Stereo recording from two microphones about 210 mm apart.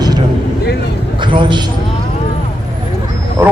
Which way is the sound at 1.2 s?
25° right (ahead or behind).